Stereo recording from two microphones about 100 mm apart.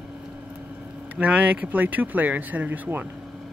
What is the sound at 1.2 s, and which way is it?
Speech, 15° right (ahead or behind).